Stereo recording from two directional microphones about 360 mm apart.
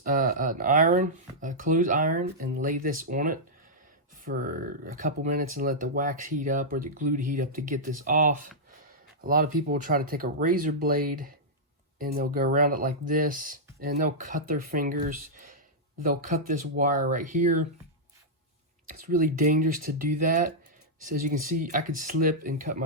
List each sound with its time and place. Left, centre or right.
0.0 s speech: right
18.9 s speech: right